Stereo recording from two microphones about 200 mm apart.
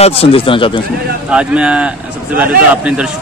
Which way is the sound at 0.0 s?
30° left (ahead or behind).